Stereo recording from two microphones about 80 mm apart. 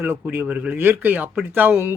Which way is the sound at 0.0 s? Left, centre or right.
Right.